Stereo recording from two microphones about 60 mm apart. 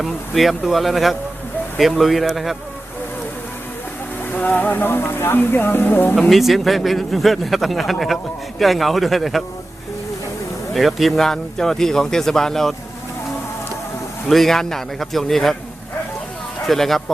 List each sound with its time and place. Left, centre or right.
0.0 s speech: centre
4.3 s speech: left
6.1 s speech: centre
10.8 s speech: centre
14.3 s speech: centre
16.6 s speech: centre